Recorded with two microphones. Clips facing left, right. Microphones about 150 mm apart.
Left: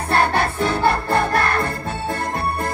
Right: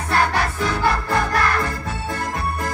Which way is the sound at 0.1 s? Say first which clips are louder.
Left 2 dB; 30° left (ahead or behind).